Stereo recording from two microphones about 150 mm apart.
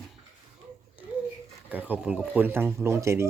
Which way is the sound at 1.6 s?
10° right (ahead or behind).